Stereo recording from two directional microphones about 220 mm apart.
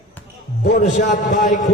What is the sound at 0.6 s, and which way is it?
A man's voice, 40° left (ahead or behind).